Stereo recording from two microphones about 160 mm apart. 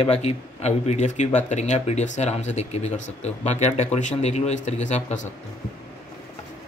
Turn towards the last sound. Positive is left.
turn(degrees=45)  # may be behind; listen again after turning